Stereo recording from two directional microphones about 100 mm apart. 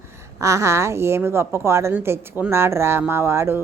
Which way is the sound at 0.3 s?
30° right (ahead or behind).